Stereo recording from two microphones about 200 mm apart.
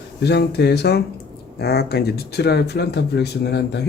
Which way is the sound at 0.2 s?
55° left (ahead or behind).